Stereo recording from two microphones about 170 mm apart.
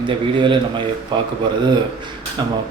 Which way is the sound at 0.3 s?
30° right (ahead or behind).